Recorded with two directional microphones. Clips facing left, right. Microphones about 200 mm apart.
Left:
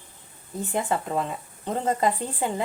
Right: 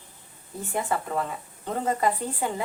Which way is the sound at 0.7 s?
20° left (ahead or behind).